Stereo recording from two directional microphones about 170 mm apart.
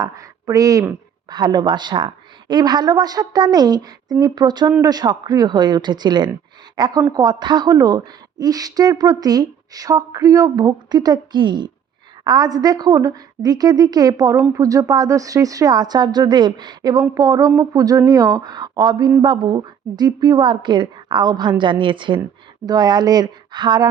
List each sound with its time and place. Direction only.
0.0 s a woman's voice: 20° right (ahead or behind)